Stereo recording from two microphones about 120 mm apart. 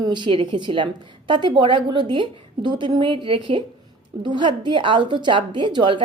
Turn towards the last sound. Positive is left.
turn(degrees=-40)  # may be behind; listen again after turning